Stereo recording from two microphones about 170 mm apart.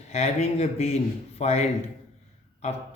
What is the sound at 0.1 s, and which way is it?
Speech, 40° left (ahead or behind).